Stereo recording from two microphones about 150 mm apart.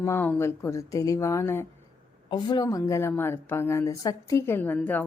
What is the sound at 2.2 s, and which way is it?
A woman's voice, 30° left (ahead or behind).